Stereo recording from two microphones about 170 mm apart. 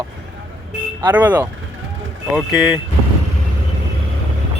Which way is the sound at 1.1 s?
10° right (ahead or behind).